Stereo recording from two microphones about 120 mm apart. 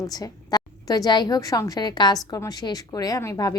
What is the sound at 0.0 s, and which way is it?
A woman's voice, 30° left (ahead or behind).